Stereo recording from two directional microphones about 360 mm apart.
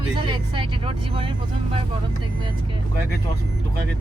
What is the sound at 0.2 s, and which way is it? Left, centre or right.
Speech, centre.